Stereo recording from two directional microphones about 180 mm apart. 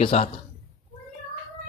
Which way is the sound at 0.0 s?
35° left (ahead or behind).